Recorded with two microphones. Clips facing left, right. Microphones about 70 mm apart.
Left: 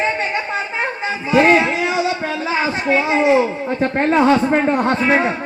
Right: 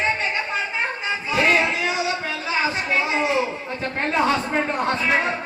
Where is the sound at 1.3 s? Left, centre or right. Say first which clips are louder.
Left 7 dB; left.